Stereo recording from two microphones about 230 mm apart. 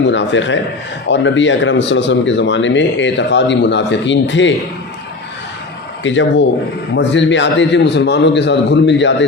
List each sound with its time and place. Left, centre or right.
0.1 s a man's voice: left
6.0 s a man's voice: left